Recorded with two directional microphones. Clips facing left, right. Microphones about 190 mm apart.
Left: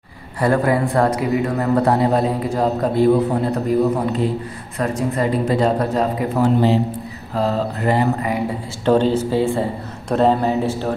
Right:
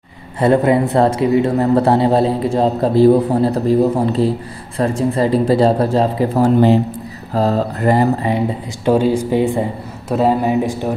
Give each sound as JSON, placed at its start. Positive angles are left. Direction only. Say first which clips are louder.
{"t": 0.4, "sound": "a man's voice", "louder": "right 4 dB", "side_deg": -20}
{"t": 8.2, "sound": "a man's voice", "louder": "right 4 dB", "side_deg": -25}
{"t": 8.8, "sound": "speech", "louder": "right 2 dB", "side_deg": -10}
{"t": 10.0, "sound": "speech", "louder": "right 1 dB", "side_deg": -5}